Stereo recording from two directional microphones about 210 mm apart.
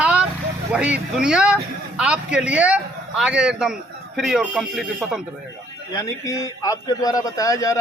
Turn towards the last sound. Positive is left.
turn(degrees=15)  # may be behind; listen again after turning